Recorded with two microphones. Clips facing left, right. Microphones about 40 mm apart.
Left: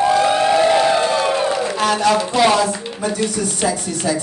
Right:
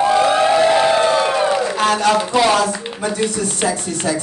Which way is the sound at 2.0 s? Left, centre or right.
Right.